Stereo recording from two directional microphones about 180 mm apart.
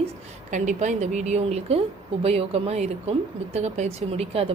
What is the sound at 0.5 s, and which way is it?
A woman's voice, 40° right (ahead or behind).